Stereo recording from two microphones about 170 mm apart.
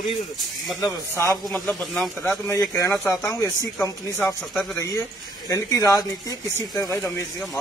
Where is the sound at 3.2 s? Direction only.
15° left (ahead or behind).